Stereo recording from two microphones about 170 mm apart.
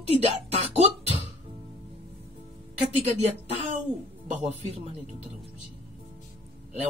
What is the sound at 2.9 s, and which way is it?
Speech, 40° right (ahead or behind).